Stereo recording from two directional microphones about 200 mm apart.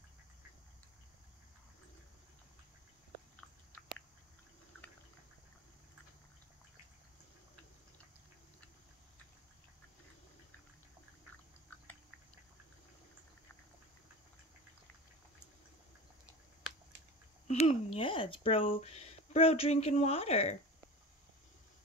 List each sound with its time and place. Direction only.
17.5 s speech: 30° left (ahead or behind)